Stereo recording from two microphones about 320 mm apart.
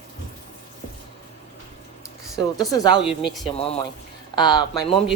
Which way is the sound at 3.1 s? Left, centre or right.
Centre.